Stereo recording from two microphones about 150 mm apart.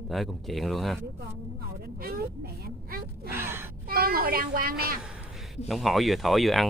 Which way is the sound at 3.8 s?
80° right.